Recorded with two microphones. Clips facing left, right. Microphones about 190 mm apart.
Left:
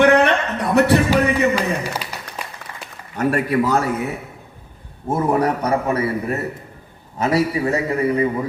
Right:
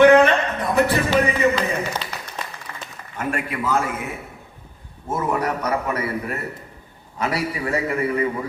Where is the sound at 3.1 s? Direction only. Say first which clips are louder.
Left 8 dB; 40° left (ahead or behind).